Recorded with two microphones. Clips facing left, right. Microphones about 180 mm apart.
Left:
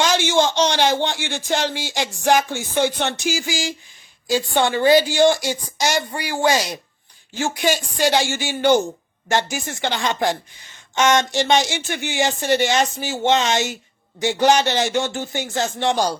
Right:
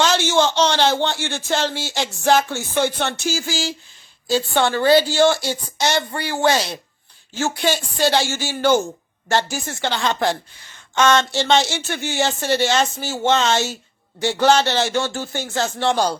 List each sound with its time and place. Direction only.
0.0 s speech: 15° left (ahead or behind)